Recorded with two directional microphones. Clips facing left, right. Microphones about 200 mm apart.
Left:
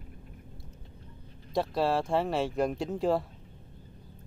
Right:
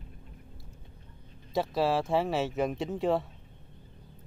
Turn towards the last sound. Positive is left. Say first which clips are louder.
# even
turn(degrees=0)  # may be behind; listen again after turning